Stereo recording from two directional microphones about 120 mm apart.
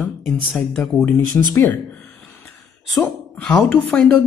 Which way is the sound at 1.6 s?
10° left (ahead or behind).